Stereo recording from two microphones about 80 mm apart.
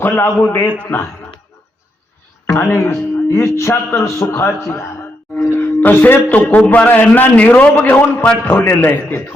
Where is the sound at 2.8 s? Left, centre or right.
Left.